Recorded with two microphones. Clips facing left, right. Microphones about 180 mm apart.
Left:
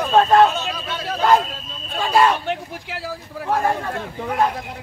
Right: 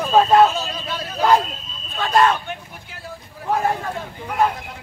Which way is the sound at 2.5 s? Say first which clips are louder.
Left 7 dB; 85° left.